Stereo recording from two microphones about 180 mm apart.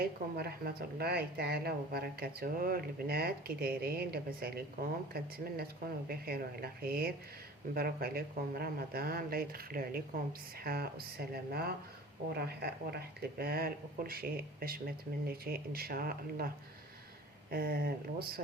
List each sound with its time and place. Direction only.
0.0 s speech: 60° right (ahead or behind)
17.5 s speech: 55° right (ahead or behind)